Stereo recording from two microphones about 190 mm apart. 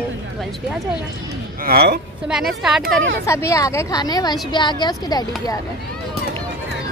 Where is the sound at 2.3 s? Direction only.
Centre (ahead or behind).